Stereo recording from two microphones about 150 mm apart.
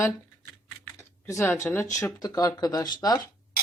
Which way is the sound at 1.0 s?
20° left (ahead or behind).